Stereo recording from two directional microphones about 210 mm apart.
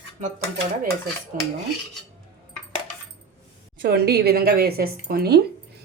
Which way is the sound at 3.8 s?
50° right (ahead or behind).